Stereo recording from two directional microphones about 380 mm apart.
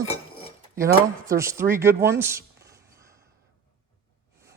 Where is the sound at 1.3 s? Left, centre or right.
Centre.